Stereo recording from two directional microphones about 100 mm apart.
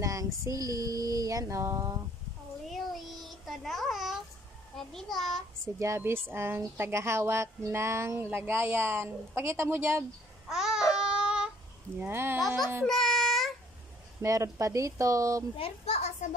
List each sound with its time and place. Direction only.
0.0 s female singing: 35° right (ahead or behind)
0.4 s child singing: 35° right (ahead or behind)
2.7 s child singing: centre (ahead or behind)
4.7 s a child's voice: 5° left (ahead or behind)
5.8 s speech: 25° right (ahead or behind)
10.5 s a sound: 5° right (ahead or behind)
12.0 s speech: 25° right (ahead or behind)
12.4 s a child's voice: centre (ahead or behind)
12.8 s baby cry: 5° left (ahead or behind)
14.2 s child singing: 30° right (ahead or behind)
15.5 s a child's voice: 75° left (ahead or behind)